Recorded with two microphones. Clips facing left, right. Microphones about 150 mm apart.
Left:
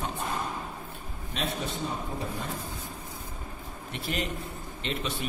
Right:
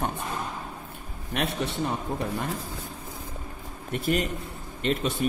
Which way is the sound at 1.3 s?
65° right (ahead or behind).